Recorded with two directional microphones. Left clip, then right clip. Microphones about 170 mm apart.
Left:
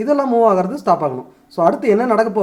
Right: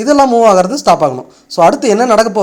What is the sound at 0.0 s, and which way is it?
Speech, 25° right (ahead or behind).